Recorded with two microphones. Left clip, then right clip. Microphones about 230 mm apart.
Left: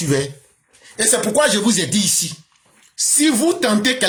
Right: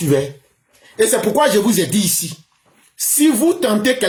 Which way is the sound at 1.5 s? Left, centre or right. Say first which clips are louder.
Right 3 dB; left.